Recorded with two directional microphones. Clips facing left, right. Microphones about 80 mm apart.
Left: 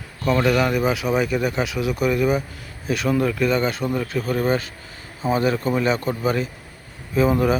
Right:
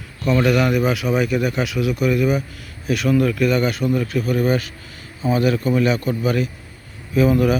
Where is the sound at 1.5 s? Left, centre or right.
Left.